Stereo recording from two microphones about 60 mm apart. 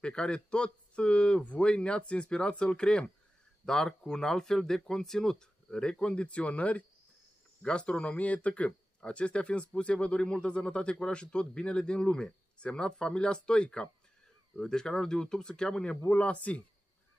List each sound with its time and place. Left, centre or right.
0.0 s speech: centre